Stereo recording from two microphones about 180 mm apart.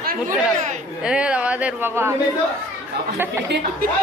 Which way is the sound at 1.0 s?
5° right (ahead or behind).